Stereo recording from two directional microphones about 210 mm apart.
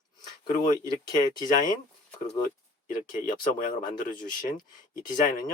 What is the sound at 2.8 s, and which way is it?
Speech, 40° left (ahead or behind).